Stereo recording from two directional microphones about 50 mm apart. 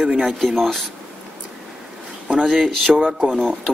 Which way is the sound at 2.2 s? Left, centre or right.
Centre.